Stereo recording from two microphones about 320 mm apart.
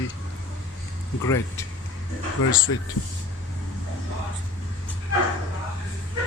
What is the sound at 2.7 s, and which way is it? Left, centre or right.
Speech, left.